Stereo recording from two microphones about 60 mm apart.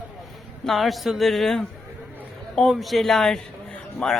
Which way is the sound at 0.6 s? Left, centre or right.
Centre.